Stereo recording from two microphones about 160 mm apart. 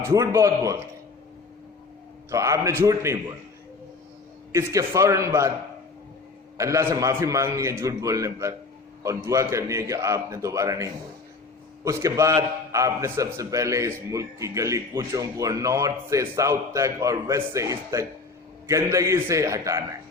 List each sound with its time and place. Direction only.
0.0 s a man's voice: 20° right (ahead or behind)
2.3 s a man's voice: 20° right (ahead or behind)
4.5 s a man's voice: 20° right (ahead or behind)
6.6 s a man's voice: 20° right (ahead or behind)
11.9 s a man's voice: 20° right (ahead or behind)